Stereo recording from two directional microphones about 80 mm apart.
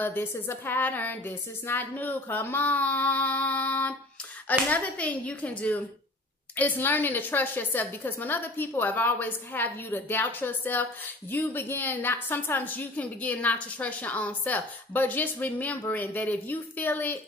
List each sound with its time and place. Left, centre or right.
0.0 s a woman's voice: left